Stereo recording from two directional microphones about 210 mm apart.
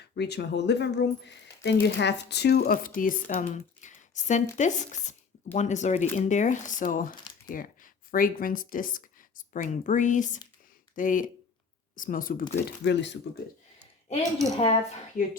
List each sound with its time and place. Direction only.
0.2 s speech: 55° left (ahead or behind)
7.1 s a sound: 20° left (ahead or behind)
7.5 s speech: 40° left (ahead or behind); by 13.1 s 55° left (ahead or behind)
14.6 s speech: 30° left (ahead or behind)